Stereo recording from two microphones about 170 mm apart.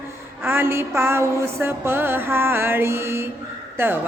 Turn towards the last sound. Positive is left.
turn(degrees=-15)  # may be behind; listen again after turning